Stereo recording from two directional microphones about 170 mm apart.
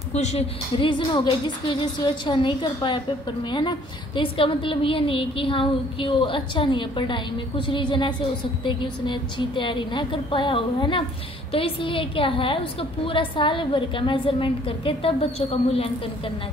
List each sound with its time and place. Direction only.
0.1 s a woman's voice: 40° left (ahead or behind)